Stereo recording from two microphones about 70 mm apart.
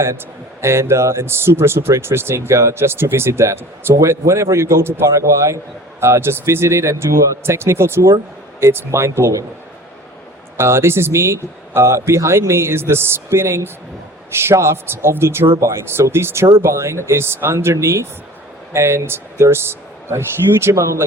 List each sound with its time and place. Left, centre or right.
0.6 s speech: right
10.6 s speech: right